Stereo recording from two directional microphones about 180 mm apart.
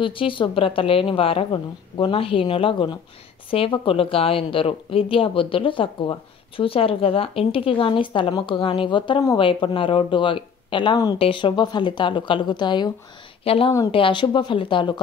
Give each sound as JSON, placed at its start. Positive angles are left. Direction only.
{"t": 0.0, "sound": "speech", "side_deg": 30}